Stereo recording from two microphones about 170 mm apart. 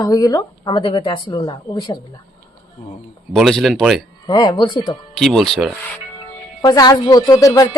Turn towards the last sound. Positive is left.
turn(degrees=20)  # may be behind; listen again after turning